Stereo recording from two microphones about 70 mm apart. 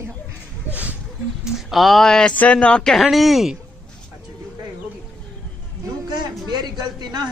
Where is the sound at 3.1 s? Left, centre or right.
Centre.